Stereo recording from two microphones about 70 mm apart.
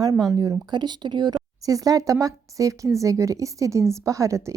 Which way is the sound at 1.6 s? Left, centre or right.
Right.